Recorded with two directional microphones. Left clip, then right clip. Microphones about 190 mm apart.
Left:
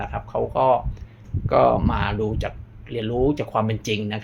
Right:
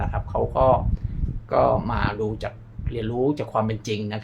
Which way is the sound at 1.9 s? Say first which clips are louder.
Left 1 dB; 5° left (ahead or behind).